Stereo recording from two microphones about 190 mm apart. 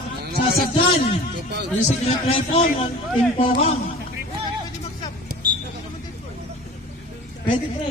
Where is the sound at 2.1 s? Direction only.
30° left (ahead or behind).